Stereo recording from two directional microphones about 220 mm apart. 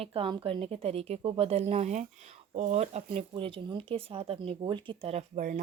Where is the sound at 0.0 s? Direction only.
25° right (ahead or behind).